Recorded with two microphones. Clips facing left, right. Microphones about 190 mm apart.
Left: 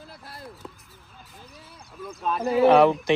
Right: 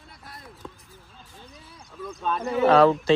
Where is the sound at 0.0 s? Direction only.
30° left (ahead or behind).